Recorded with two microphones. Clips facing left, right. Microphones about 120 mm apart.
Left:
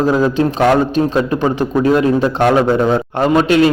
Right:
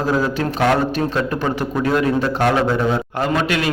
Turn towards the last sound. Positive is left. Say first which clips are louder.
# left 8 dB
turn(degrees=30)  # may be behind; listen again after turning